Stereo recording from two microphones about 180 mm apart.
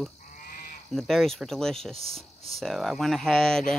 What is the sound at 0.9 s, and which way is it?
Speech, centre (ahead or behind).